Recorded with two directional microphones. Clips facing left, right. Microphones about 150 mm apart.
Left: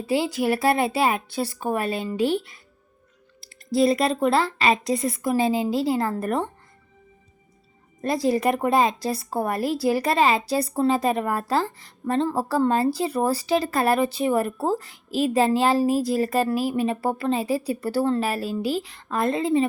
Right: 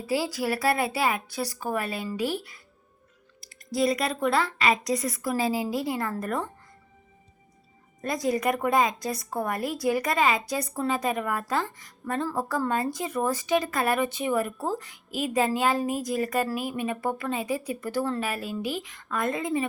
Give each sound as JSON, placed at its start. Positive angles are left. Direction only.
{"t": 0.1, "sound": "speech", "side_deg": 25}
{"t": 8.0, "sound": "speech", "side_deg": 30}